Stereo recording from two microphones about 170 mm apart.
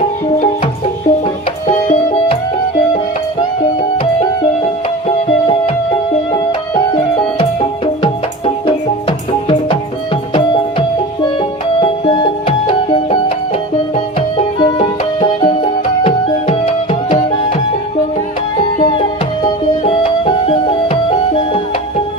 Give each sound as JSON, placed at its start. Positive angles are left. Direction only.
{"t": 1.6, "sound": "music", "side_deg": 50}
{"t": 5.0, "sound": "music", "side_deg": 35}
{"t": 8.6, "sound": "music", "side_deg": 30}
{"t": 18.8, "sound": "music", "side_deg": 30}